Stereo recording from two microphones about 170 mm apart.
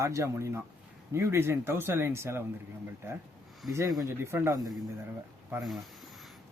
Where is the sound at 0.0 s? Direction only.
15° right (ahead or behind).